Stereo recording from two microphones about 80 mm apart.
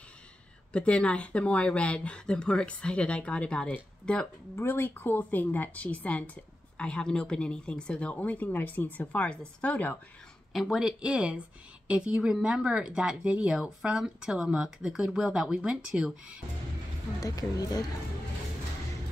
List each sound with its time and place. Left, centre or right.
0.7 s a woman's voice: centre
4.6 s a woman's voice: left
10.5 s speech: centre
17.2 s speech: left